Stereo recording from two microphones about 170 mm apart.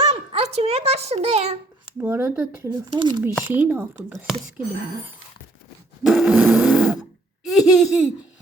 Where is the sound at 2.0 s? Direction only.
15° right (ahead or behind).